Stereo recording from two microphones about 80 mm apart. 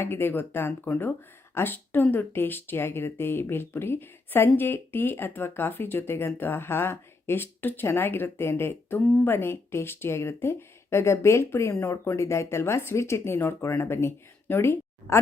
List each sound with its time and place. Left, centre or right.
0.0 s speech: left